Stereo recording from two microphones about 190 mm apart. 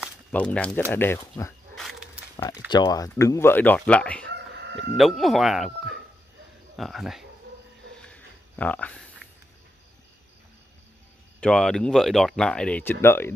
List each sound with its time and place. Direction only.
0.3 s speech: 5° left (ahead or behind)
1.8 s a sound: centre (ahead or behind)
2.7 s speech: 20° left (ahead or behind); by 4.3 s 5° left (ahead or behind)
4.6 s chicken: 65° right (ahead or behind)
4.9 s speech: centre (ahead or behind)
8.1 s a sound: 5° left (ahead or behind)
11.4 s speech: 5° left (ahead or behind)